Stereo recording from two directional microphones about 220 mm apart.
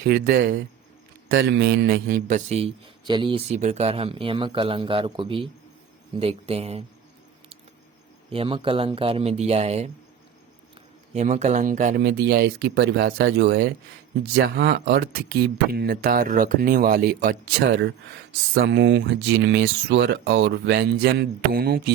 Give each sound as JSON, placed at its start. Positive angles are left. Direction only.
{"t": 0.0, "sound": "a man's voice", "side_deg": -45}
{"t": 8.3, "sound": "a man's voice", "side_deg": -25}
{"t": 11.1, "sound": "speech", "side_deg": -30}
{"t": 12.0, "sound": "speech", "side_deg": -50}